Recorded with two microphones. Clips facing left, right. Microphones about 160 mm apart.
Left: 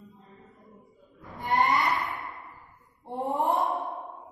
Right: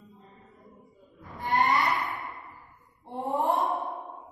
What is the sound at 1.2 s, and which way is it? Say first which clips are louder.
Cattle: left 1 dB; centre (ahead or behind).